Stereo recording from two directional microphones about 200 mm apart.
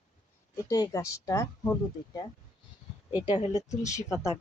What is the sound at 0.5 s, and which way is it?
Speech, 15° left (ahead or behind).